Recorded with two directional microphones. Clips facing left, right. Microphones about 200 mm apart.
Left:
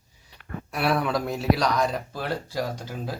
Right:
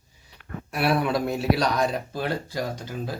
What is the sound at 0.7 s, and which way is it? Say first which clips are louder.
A man's voice: right 1 dB; 5° right (ahead or behind).